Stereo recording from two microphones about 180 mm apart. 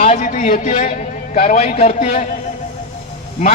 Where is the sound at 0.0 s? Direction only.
40° left (ahead or behind).